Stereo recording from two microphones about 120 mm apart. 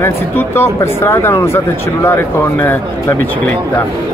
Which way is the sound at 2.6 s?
20° left (ahead or behind).